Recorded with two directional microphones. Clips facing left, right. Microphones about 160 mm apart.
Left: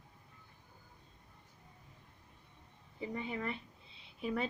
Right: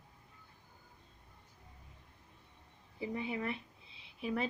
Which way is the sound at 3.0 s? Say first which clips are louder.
Right 1 dB; 5° right (ahead or behind).